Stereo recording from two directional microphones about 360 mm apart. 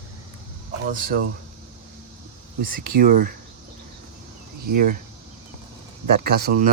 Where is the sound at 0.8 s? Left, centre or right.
Right.